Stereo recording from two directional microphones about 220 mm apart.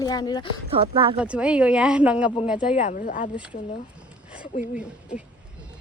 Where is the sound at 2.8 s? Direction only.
35° left (ahead or behind).